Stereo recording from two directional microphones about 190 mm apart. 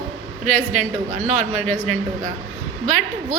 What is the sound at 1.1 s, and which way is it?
Speech, 40° right (ahead or behind).